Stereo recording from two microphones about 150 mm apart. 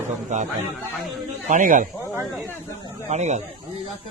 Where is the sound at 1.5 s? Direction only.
60° right (ahead or behind).